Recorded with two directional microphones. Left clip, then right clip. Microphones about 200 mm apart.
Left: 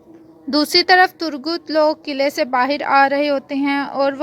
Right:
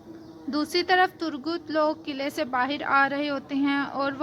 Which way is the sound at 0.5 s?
35° left (ahead or behind).